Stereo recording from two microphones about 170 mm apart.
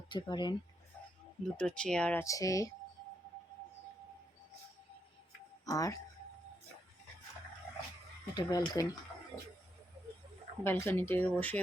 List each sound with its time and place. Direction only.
0.1 s speech: 25° left (ahead or behind)
1.5 s speech: 5° left (ahead or behind)
2.2 s speech: 20° left (ahead or behind)
5.6 s speech: 20° left (ahead or behind)
8.4 s speech: 25° left (ahead or behind)
9.3 s speech: 5° left (ahead or behind)
10.6 s speech: 15° left (ahead or behind)